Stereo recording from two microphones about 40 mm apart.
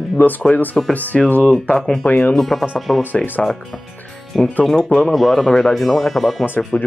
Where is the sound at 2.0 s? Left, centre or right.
Left.